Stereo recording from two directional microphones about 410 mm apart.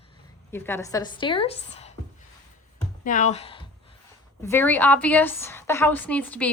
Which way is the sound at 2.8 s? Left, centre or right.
Centre.